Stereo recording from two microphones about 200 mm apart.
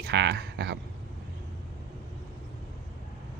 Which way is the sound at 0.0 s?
60° right (ahead or behind).